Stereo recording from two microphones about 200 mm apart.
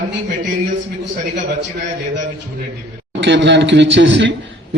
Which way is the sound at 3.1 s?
65° right (ahead or behind).